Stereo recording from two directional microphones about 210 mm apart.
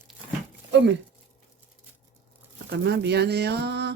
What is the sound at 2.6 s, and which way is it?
Speech, 50° right (ahead or behind).